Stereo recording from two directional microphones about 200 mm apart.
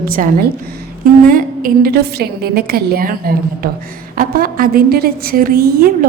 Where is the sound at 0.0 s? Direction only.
45° right (ahead or behind).